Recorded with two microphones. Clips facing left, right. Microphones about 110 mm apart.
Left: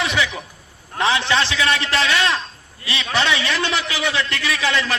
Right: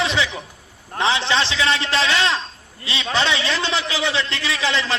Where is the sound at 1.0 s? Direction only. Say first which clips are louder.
Left 1 dB; 25° right (ahead or behind).